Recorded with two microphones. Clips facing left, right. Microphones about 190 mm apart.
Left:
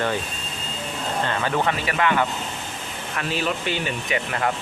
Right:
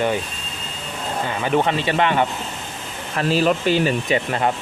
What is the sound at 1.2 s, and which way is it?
Speech, 15° right (ahead or behind).